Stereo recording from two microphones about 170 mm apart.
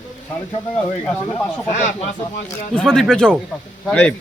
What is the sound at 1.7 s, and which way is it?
Speech, 45° left (ahead or behind).